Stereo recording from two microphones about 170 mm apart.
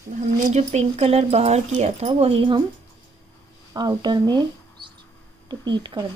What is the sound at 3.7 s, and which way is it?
Speech, 25° right (ahead or behind).